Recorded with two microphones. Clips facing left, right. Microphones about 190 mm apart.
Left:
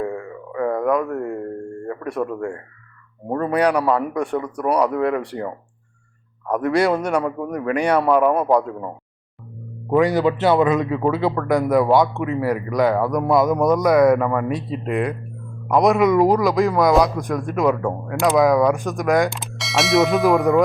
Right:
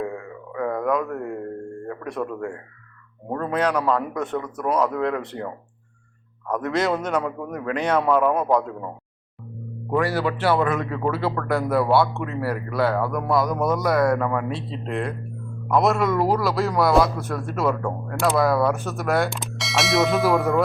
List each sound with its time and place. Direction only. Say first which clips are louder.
0.0 s a sound: left 3 dB; 5° right (ahead or behind)
1.9 s a man's voice: left 4 dB; 10° left (ahead or behind)
3.2 s speech: left 4 dB; 10° left (ahead or behind)
6.5 s speech: left 5 dB; 10° left (ahead or behind)
9.9 s speech: left 6 dB; 20° left (ahead or behind)
13.7 s speech: left 6 dB; centre (ahead or behind); by 16.6 s 15° left (ahead or behind)
16.6 s speech: left 1 dB; centre (ahead or behind)
17.2 s speech: left 5 dB; 15° left (ahead or behind)
19.3 s speech: left 2 dB; centre (ahead or behind)